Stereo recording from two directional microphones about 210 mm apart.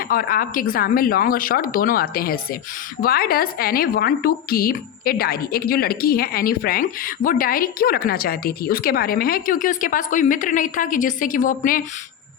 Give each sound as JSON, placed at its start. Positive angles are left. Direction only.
{"t": 0.0, "sound": "a woman's voice", "side_deg": 45}